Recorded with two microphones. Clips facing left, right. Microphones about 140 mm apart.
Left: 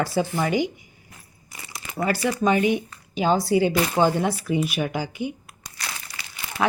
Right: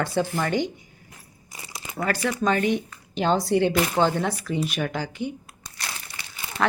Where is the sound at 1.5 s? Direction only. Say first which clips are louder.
Even; 20° right (ahead or behind).